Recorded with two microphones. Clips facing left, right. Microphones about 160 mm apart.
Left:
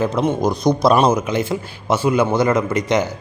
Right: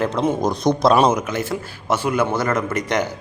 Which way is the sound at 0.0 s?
10° left (ahead or behind).